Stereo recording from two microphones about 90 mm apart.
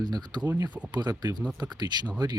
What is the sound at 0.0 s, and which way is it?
Speech, 50° right (ahead or behind).